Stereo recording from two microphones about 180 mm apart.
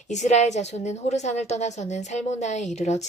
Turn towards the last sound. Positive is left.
turn(degrees=40)  # may be behind; listen again after turning